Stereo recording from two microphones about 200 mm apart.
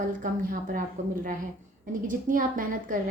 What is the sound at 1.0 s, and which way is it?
A woman's voice, 40° right (ahead or behind).